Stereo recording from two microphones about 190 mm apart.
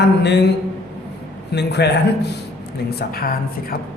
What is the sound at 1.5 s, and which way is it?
A woman's voice, 60° left (ahead or behind).